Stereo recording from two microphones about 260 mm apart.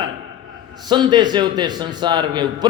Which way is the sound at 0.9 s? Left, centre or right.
Centre.